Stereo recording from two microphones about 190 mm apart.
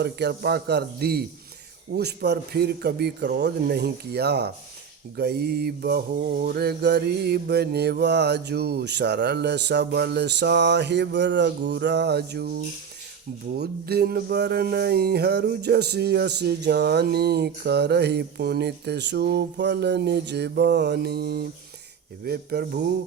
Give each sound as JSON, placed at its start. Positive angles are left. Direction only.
{"t": 0.0, "sound": "music", "side_deg": -60}